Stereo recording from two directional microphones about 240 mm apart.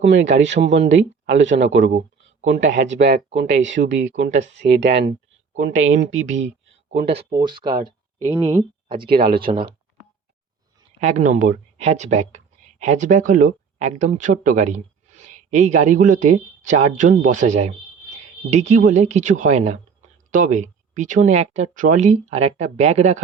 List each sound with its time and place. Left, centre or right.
0.0 s speech: right
7.2 s speech: right
7.6 s a woman's voice: right
8.3 s speech: centre
9.0 s speech: right
9.5 s a woman's voice: right
11.0 s a woman's voice: right